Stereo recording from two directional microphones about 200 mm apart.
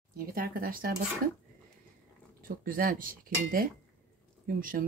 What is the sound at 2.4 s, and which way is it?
Speech, 45° right (ahead or behind).